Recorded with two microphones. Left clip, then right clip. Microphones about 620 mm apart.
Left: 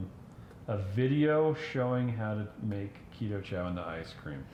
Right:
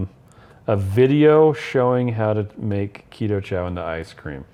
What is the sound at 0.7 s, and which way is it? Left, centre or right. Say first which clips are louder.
Speech: right 16 dB; right.